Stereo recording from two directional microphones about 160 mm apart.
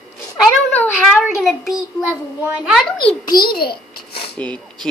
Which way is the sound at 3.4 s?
70° left (ahead or behind).